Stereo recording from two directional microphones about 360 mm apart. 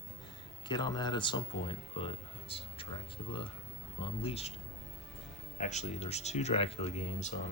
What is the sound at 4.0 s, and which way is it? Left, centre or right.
Speech, centre.